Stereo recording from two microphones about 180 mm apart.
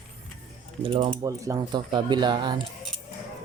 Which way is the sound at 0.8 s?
30° right (ahead or behind).